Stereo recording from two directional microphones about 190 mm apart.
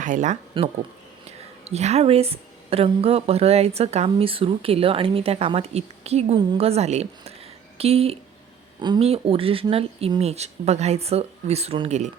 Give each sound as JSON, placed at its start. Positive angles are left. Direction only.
{"t": 0.0, "sound": "speech", "side_deg": -40}
{"t": 0.6, "sound": "a woman's voice", "side_deg": -25}